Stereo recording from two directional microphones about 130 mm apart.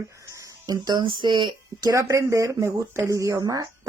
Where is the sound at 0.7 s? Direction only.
35° right (ahead or behind).